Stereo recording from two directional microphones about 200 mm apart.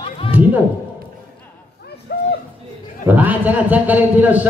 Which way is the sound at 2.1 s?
55° left (ahead or behind).